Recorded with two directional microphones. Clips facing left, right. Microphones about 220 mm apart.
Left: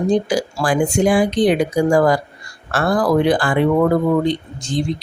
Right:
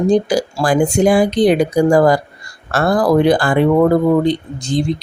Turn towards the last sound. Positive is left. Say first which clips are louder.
# right 4 dB
turn(degrees=-35)  # may be behind; listen again after turning